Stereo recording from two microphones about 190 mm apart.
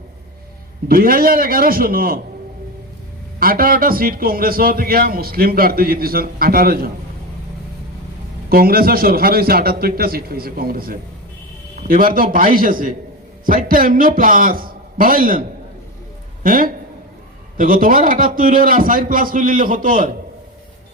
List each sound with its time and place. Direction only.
0.9 s a man's voice: 50° right (ahead or behind)
3.4 s a man's voice: 50° right (ahead or behind)
8.4 s a man's voice: 50° right (ahead or behind)